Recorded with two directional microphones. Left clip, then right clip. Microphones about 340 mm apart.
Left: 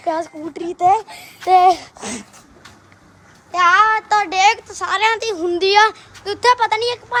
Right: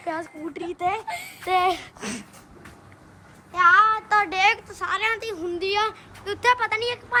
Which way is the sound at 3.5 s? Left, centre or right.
Centre.